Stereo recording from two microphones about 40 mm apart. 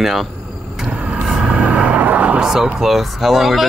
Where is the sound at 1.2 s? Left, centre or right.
Centre.